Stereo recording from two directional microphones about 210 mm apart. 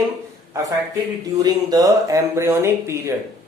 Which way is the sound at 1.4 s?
20° right (ahead or behind).